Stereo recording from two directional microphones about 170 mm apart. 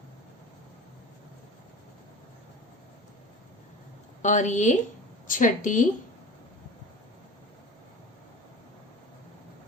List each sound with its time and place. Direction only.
4.2 s a woman's voice: 45° left (ahead or behind)